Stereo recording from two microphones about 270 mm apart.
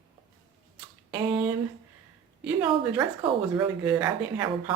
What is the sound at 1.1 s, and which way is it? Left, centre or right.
A woman's voice, centre.